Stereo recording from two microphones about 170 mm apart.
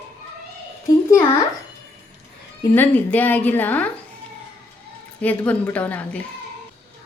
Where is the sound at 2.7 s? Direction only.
10° left (ahead or behind).